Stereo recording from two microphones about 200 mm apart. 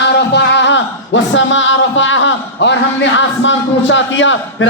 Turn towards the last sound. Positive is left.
turn(degrees=70)  # may be behind; listen again after turning